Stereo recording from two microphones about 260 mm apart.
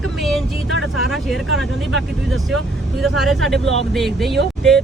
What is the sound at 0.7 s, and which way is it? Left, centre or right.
Speech, left.